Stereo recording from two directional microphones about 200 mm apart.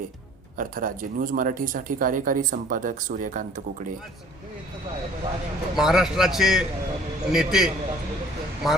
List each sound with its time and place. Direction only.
0.5 s speech: 45° right (ahead or behind)
5.7 s a man's voice: centre (ahead or behind)